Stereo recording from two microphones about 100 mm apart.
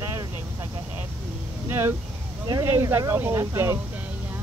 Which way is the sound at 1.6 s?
20° right (ahead or behind).